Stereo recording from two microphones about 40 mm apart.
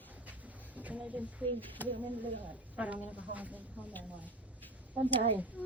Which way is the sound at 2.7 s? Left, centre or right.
Right.